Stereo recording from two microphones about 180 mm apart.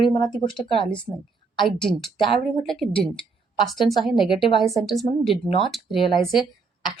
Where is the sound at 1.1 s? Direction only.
25° right (ahead or behind).